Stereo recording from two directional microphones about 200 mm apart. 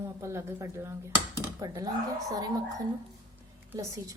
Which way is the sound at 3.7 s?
15° right (ahead or behind).